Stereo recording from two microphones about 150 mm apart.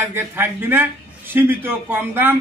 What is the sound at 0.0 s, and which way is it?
A man's voice, 15° right (ahead or behind).